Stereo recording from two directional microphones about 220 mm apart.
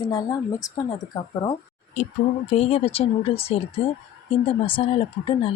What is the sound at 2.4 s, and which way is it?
Speech, 30° left (ahead or behind).